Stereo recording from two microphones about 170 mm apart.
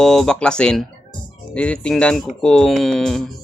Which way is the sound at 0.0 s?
5° left (ahead or behind).